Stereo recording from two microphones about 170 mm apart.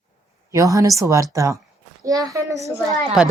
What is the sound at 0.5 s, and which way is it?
A woman's voice, 20° right (ahead or behind).